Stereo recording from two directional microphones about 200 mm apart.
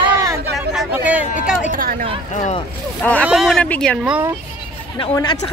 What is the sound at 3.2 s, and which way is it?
Speech, centre (ahead or behind).